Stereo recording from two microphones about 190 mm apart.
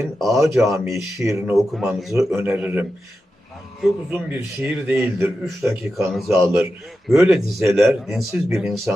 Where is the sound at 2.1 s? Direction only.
15° right (ahead or behind).